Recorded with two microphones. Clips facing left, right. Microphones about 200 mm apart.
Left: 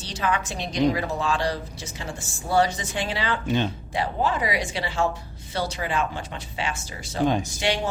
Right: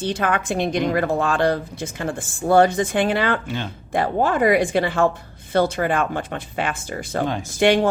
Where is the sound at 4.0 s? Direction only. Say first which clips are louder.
Right 6 dB; 55° right (ahead or behind).